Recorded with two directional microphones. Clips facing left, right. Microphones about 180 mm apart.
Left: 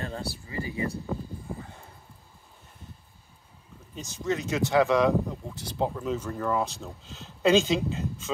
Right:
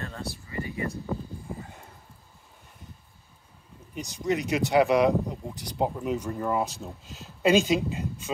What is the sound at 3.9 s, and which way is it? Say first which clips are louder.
Speech: right 2 dB; 15° right (ahead or behind).